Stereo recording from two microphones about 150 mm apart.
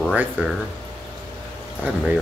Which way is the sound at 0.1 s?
10° right (ahead or behind).